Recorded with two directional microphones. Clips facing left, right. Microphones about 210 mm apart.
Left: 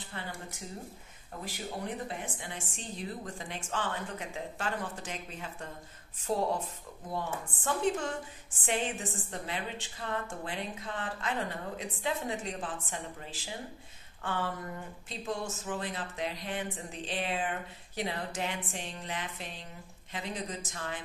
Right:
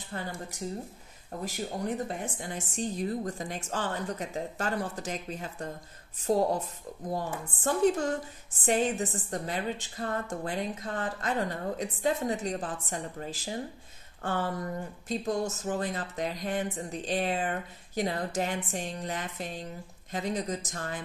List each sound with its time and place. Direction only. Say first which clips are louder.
0.1 s a woman's voice: right 6 dB; 40° right (ahead or behind)